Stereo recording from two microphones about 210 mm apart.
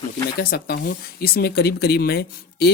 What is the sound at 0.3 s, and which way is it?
Speech, 45° left (ahead or behind).